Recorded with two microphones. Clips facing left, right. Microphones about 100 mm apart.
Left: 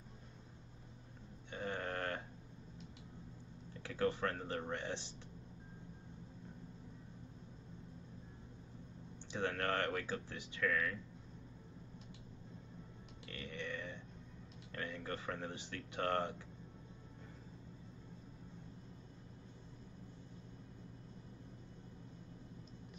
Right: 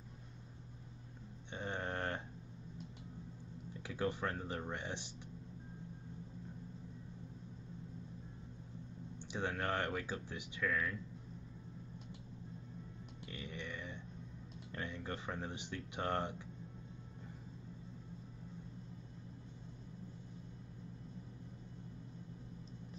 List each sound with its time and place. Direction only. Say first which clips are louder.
1.5 s a sound: even; 25° right (ahead or behind)
3.8 s speech: left 2 dB; 15° right (ahead or behind)
9.3 s speech: left 1 dB; 15° right (ahead or behind)
13.3 s burping: left 2 dB; 15° right (ahead or behind)
14.7 s speech: even; 20° right (ahead or behind)